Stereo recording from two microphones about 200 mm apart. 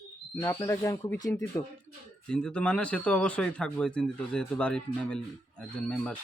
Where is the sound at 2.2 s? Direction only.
5° left (ahead or behind).